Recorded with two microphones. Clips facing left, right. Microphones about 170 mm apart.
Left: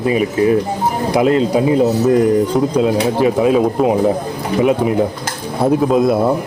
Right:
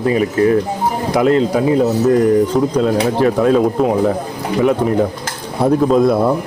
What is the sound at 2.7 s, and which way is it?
Speech, 10° left (ahead or behind).